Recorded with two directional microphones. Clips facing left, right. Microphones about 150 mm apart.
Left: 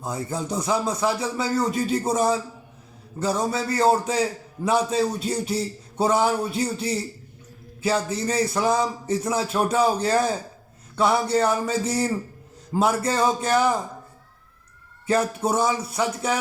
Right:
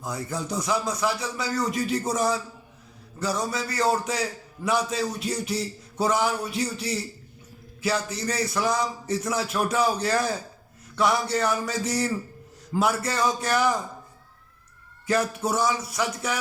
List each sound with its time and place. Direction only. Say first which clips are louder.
0.0 s a man's voice: left 3 dB; 25° left (ahead or behind)
15.0 s speech: left 3 dB; 30° left (ahead or behind)